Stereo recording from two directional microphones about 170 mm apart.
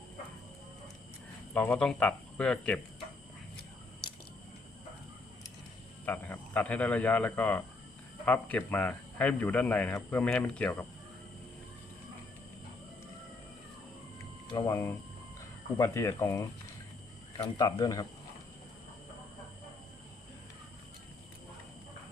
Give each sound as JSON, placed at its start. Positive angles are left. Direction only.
{"t": 1.5, "sound": "speech", "side_deg": 10}
{"t": 6.1, "sound": "speech", "side_deg": 10}
{"t": 14.5, "sound": "speech", "side_deg": 20}